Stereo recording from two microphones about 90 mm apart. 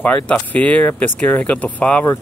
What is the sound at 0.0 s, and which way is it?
Speech, 15° left (ahead or behind).